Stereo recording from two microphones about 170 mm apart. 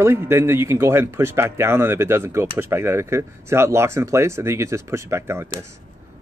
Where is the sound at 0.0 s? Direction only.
15° right (ahead or behind).